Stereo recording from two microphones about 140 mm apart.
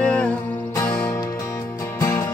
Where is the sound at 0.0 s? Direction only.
5° left (ahead or behind); by 2.2 s 20° left (ahead or behind).